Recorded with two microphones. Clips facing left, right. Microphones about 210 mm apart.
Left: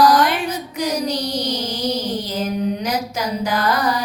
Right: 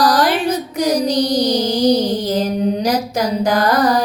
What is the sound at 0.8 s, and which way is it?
Child singing, 35° right (ahead or behind).